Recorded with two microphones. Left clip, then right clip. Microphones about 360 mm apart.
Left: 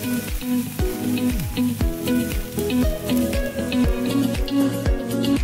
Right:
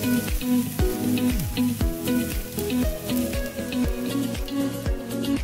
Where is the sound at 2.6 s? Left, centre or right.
Left.